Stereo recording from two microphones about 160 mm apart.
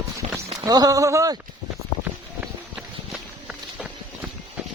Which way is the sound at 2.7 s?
5° right (ahead or behind).